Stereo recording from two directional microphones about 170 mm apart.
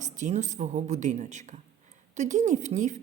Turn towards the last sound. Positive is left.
turn(degrees=-45)  # may be behind; listen again after turning